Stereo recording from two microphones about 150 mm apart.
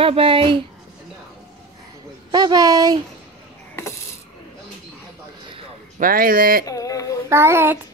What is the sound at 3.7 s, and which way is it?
Mechanisms, 20° left (ahead or behind).